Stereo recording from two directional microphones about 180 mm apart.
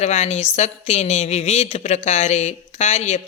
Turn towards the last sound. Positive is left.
turn(degrees=35)  # may be behind; listen again after turning